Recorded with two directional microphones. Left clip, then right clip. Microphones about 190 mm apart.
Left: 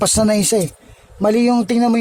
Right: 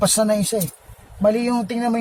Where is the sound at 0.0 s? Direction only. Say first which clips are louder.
Left 2 dB; 60° left (ahead or behind).